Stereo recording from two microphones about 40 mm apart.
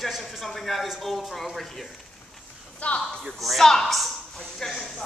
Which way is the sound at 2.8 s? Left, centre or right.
Left.